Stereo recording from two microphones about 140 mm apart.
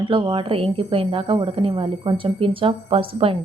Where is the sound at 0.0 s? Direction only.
35° right (ahead or behind).